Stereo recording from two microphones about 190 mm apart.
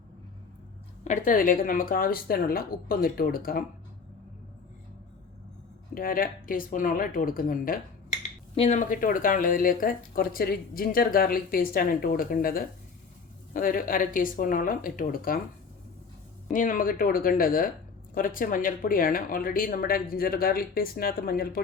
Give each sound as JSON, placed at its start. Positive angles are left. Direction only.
{"t": 1.0, "sound": "speech", "side_deg": 40}
{"t": 5.9, "sound": "speech", "side_deg": 50}
{"t": 8.5, "sound": "speech", "side_deg": 35}
{"t": 16.5, "sound": "speech", "side_deg": 45}